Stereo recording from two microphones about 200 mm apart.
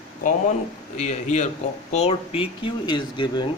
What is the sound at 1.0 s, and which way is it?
A man's voice, 35° left (ahead or behind).